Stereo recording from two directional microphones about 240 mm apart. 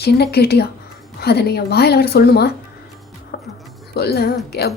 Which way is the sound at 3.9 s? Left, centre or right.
Left.